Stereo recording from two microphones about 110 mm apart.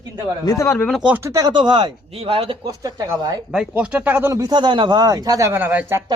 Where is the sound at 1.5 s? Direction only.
45° right (ahead or behind).